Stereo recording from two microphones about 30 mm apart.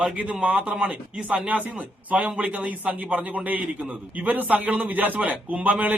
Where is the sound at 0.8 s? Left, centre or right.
Right.